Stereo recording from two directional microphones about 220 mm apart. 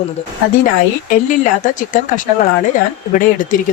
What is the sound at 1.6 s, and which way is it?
Speech, 35° left (ahead or behind).